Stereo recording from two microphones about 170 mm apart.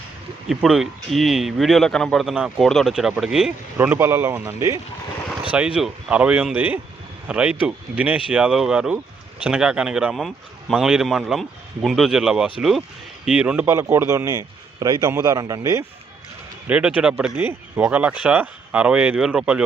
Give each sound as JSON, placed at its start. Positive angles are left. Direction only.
{"t": 0.4, "sound": "speech", "side_deg": 0}
{"t": 3.8, "sound": "a man's voice", "side_deg": -15}
{"t": 16.6, "sound": "speech", "side_deg": -10}